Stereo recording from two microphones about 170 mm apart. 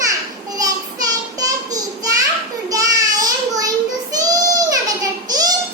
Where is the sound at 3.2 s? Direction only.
20° right (ahead or behind).